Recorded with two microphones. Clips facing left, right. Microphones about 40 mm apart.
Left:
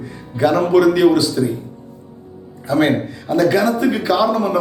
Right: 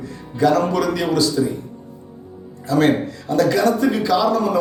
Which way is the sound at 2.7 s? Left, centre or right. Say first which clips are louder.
Left 1 dB; centre.